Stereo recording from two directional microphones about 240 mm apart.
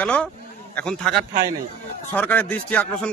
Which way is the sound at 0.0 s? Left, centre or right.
Centre.